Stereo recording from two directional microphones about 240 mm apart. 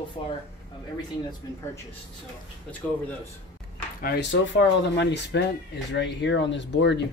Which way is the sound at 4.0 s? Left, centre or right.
Left.